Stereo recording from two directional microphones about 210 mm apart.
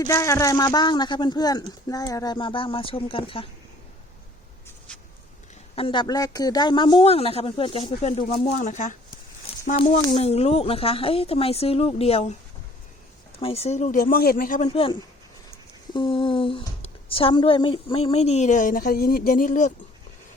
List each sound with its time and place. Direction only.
0.0 s a woman's voice: 15° left (ahead or behind)
5.7 s a woman's voice: 25° left (ahead or behind)
13.4 s speech: 30° left (ahead or behind)
14.7 s a woman's voice: 25° left (ahead or behind)